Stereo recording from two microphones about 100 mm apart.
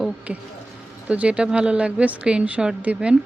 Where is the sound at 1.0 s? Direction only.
15° right (ahead or behind).